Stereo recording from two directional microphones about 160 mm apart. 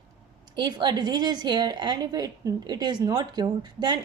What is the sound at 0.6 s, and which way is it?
A woman's voice, 25° right (ahead or behind).